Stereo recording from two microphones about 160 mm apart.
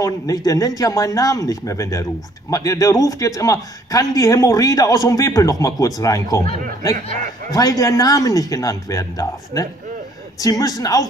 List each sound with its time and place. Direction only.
0.0 s a man's voice: 20° left (ahead or behind)
7.5 s a man's voice: 20° left (ahead or behind)